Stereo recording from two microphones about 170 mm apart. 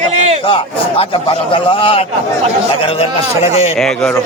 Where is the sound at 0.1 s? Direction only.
40° right (ahead or behind).